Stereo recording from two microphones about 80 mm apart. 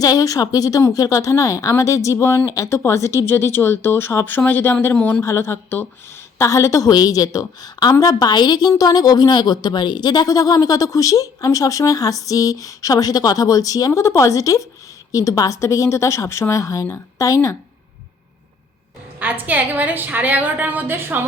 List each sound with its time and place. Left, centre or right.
0.0 s a woman's voice: left
4.9 s speech: centre
5.2 s a woman's voice: left
19.2 s a woman's voice: right